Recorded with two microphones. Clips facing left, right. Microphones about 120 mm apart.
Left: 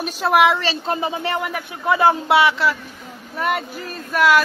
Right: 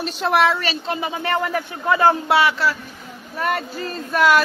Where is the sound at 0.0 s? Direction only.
10° left (ahead or behind).